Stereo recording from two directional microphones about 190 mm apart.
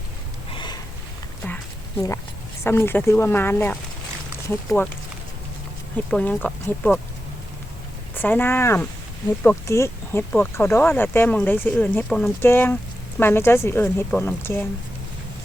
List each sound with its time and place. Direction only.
0.5 s snort: 25° left (ahead or behind)
1.5 s a sound: 10° left (ahead or behind)
2.6 s speech: 10° left (ahead or behind)
4.8 s speech: 10° left (ahead or behind)
6.1 s speech: 5° left (ahead or behind)
8.1 s speech: 10° left (ahead or behind)